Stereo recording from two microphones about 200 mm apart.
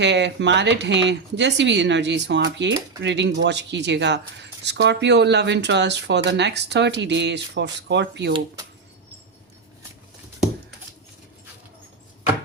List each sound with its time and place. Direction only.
0.0 s speech: 60° right (ahead or behind)